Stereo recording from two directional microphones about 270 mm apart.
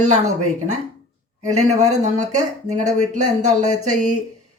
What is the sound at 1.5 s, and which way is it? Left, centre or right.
Speech, right.